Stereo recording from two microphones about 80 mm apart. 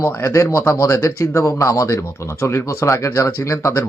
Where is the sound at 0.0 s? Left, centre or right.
Left.